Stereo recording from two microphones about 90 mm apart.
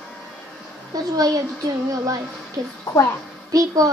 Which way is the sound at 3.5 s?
40° right (ahead or behind).